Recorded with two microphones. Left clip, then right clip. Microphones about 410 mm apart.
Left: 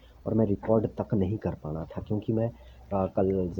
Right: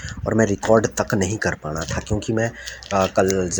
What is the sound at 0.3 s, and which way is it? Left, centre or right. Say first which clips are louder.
Speech: right 9 dB; left.